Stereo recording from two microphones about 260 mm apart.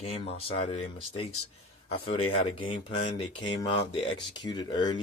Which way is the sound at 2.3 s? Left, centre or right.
Left.